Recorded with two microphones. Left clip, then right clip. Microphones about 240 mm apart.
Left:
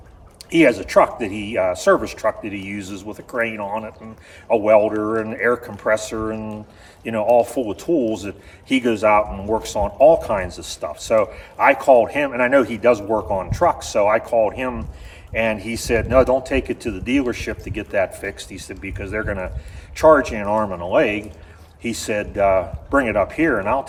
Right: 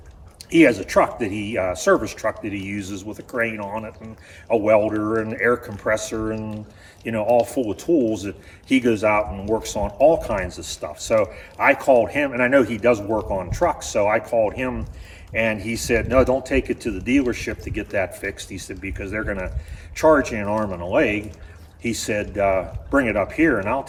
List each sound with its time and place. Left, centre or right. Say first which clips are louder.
0.5 s speech: left 1 dB; centre